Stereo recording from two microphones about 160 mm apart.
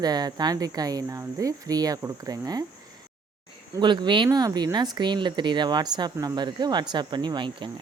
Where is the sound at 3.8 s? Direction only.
30° right (ahead or behind).